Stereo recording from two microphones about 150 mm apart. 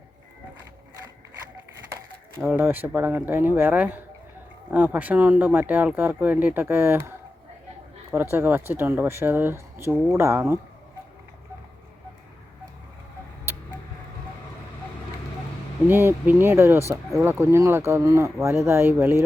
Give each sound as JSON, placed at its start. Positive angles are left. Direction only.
{"t": 2.4, "sound": "speech", "side_deg": -15}
{"t": 8.1, "sound": "speech", "side_deg": -15}
{"t": 15.9, "sound": "speech", "side_deg": -15}